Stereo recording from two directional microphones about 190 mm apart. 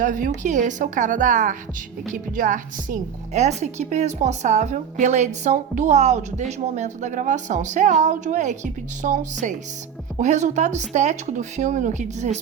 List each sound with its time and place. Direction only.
0.0 s a woman's voice: 40° right (ahead or behind)